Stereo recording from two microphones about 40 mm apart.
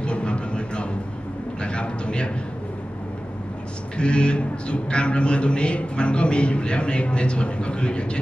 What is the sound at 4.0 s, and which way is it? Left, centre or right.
A man's voice, left.